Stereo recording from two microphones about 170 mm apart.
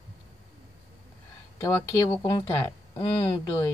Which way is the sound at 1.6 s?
20° left (ahead or behind).